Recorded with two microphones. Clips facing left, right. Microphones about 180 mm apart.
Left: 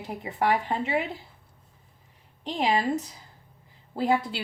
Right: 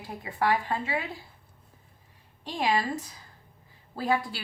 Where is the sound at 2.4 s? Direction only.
15° left (ahead or behind).